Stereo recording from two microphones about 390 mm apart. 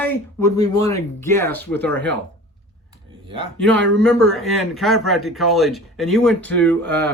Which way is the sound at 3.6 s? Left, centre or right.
Right.